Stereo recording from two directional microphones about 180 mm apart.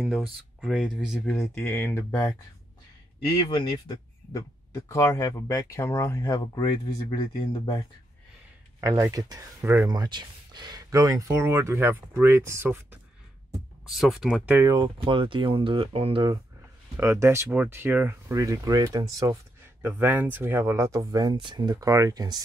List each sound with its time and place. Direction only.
0.0 s speech: centre (ahead or behind)
1.7 s speech: 15° left (ahead or behind)
3.4 s speech: 25° left (ahead or behind)
8.8 s speech: 15° right (ahead or behind)
13.8 s speech: centre (ahead or behind); by 16.3 s 25° right (ahead or behind)
16.9 s speech: 15° right (ahead or behind)
19.8 s speech: 10° right (ahead or behind)